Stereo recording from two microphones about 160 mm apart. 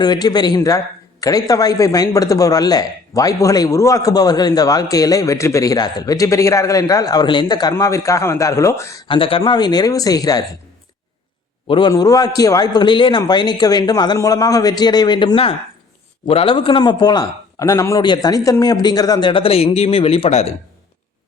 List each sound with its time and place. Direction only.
0.0 s a man's voice: 25° left (ahead or behind)
9.0 s a man's voice: 35° left (ahead or behind)
11.7 s a man's voice: 30° left (ahead or behind)